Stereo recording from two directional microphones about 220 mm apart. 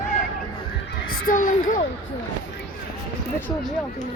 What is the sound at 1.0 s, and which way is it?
Speech, 40° left (ahead or behind).